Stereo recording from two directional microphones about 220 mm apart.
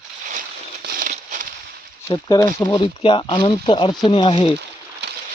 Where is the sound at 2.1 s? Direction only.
20° left (ahead or behind).